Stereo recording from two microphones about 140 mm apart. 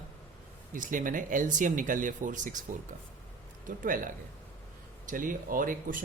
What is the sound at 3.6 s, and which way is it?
Speech, 80° right.